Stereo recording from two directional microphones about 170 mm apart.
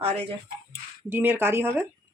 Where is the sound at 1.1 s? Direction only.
10° right (ahead or behind).